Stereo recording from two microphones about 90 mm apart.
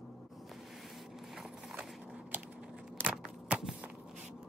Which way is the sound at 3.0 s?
15° right (ahead or behind).